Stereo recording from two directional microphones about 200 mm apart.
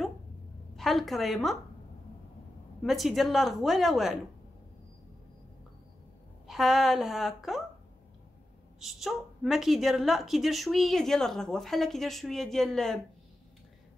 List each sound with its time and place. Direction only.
0.7 s a woman's voice: centre (ahead or behind)
2.8 s a woman's voice: centre (ahead or behind)
6.4 s a woman's voice: centre (ahead or behind)
8.7 s a woman's voice: centre (ahead or behind)